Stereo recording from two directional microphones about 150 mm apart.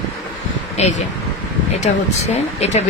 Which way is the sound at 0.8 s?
45° left (ahead or behind).